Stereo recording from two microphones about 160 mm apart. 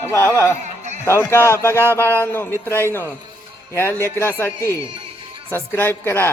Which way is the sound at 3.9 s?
20° right (ahead or behind).